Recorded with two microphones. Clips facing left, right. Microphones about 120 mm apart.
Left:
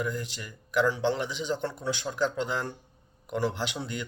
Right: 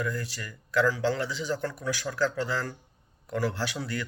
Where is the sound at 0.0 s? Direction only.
20° left (ahead or behind).